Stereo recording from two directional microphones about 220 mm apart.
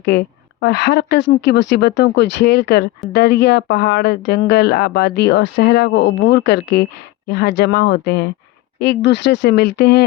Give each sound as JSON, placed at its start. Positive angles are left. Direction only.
{"t": 0.0, "sound": "a woman's voice", "side_deg": 50}